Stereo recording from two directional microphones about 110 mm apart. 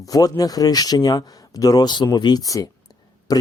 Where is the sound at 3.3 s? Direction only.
35° left (ahead or behind).